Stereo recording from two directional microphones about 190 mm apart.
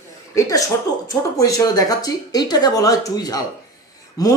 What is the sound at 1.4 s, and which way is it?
Speech, 20° left (ahead or behind).